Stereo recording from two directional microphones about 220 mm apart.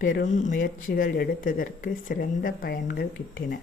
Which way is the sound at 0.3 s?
35° left (ahead or behind).